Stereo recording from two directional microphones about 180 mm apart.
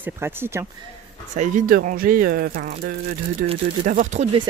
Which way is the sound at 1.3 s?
45° right (ahead or behind).